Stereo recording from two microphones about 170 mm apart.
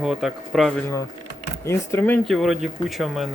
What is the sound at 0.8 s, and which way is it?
Speech, 15° left (ahead or behind).